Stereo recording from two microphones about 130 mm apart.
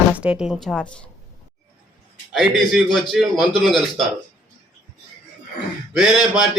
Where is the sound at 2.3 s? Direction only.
Centre (ahead or behind).